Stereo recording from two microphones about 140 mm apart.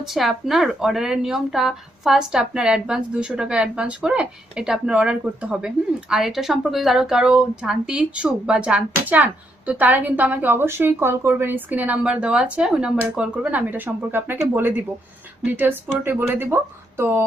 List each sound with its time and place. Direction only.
0.0 s speech: centre (ahead or behind); by 17.2 s 15° right (ahead or behind)